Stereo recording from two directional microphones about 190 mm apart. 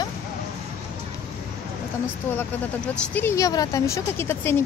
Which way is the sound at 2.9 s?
10° left (ahead or behind).